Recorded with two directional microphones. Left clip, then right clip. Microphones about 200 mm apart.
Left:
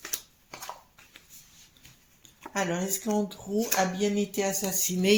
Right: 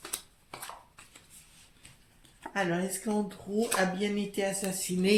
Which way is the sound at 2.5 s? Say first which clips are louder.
Left 1 dB; 35° left (ahead or behind).